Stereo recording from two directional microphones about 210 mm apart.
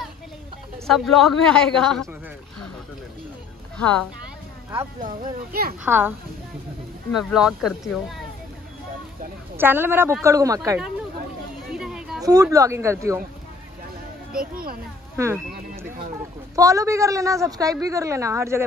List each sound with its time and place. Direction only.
0.8 s a woman's voice: centre (ahead or behind)
3.7 s a woman's voice: 5° left (ahead or behind)
5.0 s speech: 45° right (ahead or behind)
5.9 s a woman's voice: 10° right (ahead or behind)
9.6 s a woman's voice: 10° right (ahead or behind)
11.6 s a sound: centre (ahead or behind)
12.2 s a woman's voice: 15° right (ahead or behind)
14.3 s speech: 45° right (ahead or behind)
15.1 s a woman's voice: 10° right (ahead or behind)
16.5 s a woman's voice: 15° right (ahead or behind)